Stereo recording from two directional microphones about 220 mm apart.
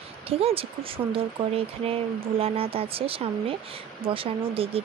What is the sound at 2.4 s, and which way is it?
Speech, 25° right (ahead or behind).